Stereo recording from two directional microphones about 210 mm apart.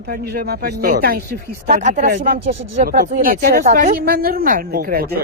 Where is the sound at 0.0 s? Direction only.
50° right (ahead or behind).